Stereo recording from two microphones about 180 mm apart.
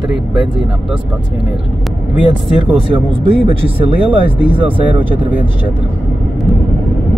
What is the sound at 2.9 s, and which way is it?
Speech, 30° right (ahead or behind).